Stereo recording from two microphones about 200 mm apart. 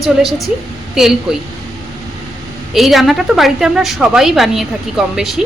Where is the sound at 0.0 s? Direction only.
Centre (ahead or behind).